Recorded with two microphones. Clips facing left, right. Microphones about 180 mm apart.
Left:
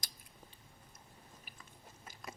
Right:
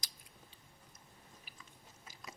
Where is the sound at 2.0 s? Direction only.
55° left (ahead or behind).